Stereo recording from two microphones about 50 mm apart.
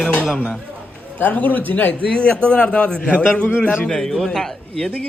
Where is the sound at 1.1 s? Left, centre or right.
Left.